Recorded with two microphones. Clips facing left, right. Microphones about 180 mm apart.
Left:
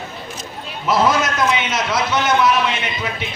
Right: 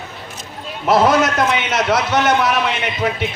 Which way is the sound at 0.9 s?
60° right (ahead or behind).